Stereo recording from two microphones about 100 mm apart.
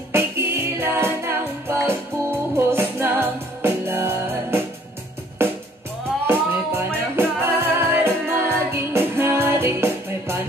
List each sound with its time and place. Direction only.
0.1 s music: 25° right (ahead or behind)
6.2 s music: 25° right (ahead or behind)